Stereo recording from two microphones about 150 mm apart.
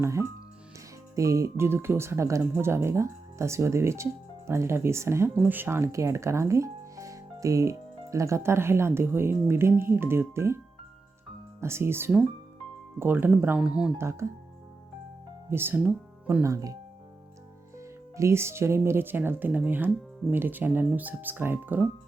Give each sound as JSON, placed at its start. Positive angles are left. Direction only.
{"t": 0.0, "sound": "speech", "side_deg": -20}
{"t": 11.6, "sound": "speech", "side_deg": -15}
{"t": 14.0, "sound": "speech", "side_deg": -20}
{"t": 15.4, "sound": "speech", "side_deg": -15}
{"t": 17.7, "sound": "speech", "side_deg": -20}